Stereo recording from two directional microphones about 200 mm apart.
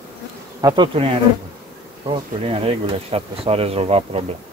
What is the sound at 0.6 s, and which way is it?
Speech, 25° right (ahead or behind).